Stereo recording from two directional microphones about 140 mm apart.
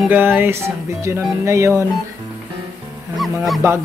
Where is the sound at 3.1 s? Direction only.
Centre (ahead or behind).